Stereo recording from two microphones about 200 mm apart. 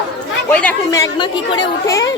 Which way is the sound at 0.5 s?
10° left (ahead or behind).